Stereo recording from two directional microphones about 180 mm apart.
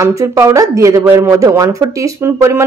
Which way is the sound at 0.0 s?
15° right (ahead or behind).